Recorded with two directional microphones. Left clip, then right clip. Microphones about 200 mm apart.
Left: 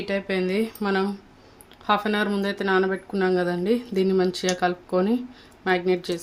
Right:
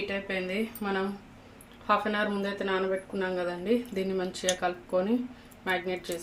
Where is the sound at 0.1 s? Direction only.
50° left (ahead or behind).